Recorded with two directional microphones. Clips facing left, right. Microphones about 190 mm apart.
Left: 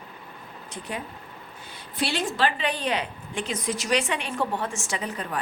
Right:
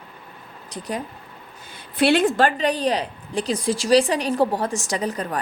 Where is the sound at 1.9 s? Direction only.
60° right (ahead or behind).